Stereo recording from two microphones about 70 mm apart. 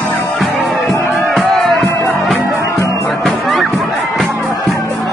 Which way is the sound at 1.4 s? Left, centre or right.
Centre.